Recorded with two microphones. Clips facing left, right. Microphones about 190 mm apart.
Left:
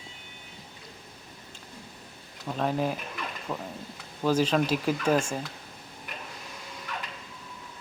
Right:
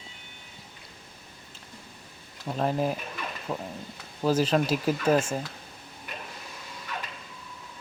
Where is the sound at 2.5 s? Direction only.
5° right (ahead or behind).